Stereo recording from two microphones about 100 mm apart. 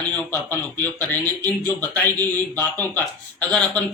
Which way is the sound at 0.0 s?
15° left (ahead or behind).